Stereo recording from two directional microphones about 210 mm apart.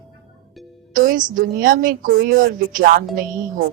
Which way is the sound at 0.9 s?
40° right (ahead or behind).